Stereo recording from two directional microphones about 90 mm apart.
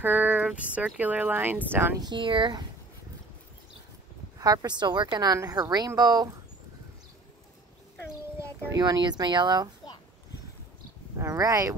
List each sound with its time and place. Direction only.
0.0 s speech: 20° right (ahead or behind)
2.0 s speech: 60° right (ahead or behind)
4.4 s speech: 45° right (ahead or behind)
8.7 s speech: 45° right (ahead or behind)
11.1 s speech: 35° right (ahead or behind)